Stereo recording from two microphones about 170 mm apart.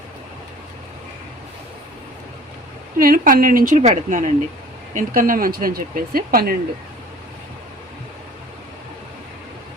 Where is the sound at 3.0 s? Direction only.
55° right (ahead or behind).